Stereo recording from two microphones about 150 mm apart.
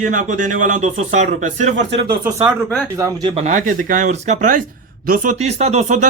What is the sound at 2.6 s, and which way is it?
Speech, 15° left (ahead or behind).